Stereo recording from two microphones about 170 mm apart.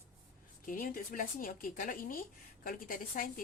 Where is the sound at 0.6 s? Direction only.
55° left (ahead or behind).